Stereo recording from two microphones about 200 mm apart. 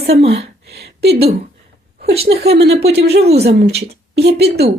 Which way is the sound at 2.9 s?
55° right (ahead or behind).